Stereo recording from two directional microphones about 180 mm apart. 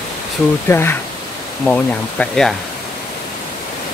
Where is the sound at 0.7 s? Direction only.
15° left (ahead or behind).